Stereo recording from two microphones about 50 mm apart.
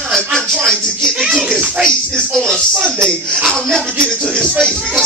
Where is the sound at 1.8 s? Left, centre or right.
Centre.